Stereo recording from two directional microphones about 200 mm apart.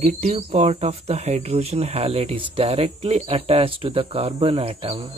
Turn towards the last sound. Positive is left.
turn(degrees=-30)  # may be behind; listen again after turning